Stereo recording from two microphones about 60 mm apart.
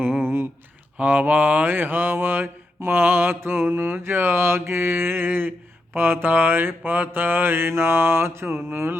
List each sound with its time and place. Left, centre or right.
0.9 s mantra: right